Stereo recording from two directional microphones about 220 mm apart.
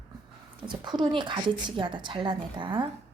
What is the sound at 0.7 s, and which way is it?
Speech, 20° right (ahead or behind).